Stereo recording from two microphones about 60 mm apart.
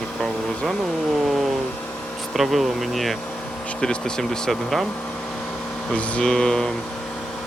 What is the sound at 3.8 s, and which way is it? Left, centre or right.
Speech, centre.